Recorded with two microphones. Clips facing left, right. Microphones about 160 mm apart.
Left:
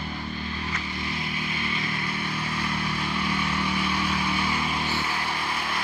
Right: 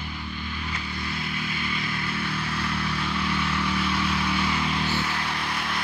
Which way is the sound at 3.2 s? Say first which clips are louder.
Even; 10° left (ahead or behind).